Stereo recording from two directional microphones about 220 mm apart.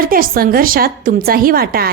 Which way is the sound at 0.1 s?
40° right (ahead or behind).